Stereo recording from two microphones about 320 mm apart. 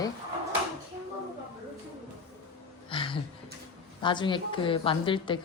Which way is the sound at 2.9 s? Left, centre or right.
Centre.